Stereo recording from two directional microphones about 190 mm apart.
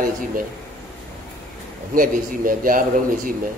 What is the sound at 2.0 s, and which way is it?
Speech, 45° right (ahead or behind).